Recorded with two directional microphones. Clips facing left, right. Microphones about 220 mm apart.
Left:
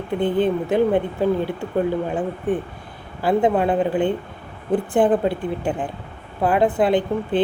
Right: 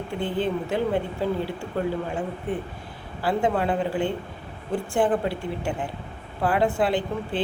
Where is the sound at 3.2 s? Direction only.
20° left (ahead or behind).